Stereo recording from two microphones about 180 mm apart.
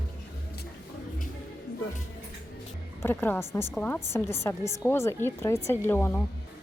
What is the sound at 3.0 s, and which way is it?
A woman's voice, 15° left (ahead or behind).